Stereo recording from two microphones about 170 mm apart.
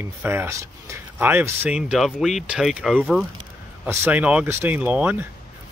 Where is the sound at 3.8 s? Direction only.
10° right (ahead or behind).